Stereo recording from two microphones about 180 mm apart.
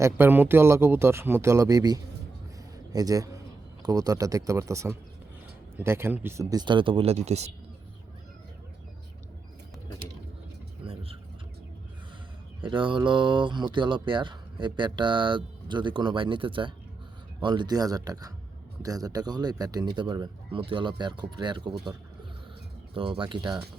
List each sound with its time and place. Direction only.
0.0 s speech: 10° right (ahead or behind); by 7.5 s 35° right (ahead or behind)
10.8 s vehicle: 30° right (ahead or behind)
12.6 s speech: 25° right (ahead or behind)
23.0 s speech: 30° right (ahead or behind)